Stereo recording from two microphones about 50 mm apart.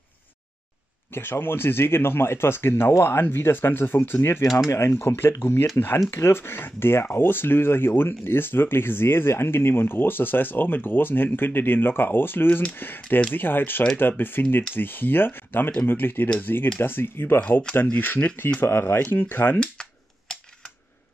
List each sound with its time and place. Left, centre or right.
1.1 s speech: left
4.6 s speech: left
17.4 s speech: left
17.9 s speech: left
18.6 s speech: left
19.1 s speech: left
19.6 s a sound: centre